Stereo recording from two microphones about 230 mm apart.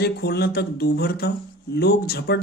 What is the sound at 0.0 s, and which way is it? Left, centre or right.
Speech, left.